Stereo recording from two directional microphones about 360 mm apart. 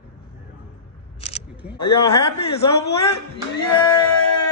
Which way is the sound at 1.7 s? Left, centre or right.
Left.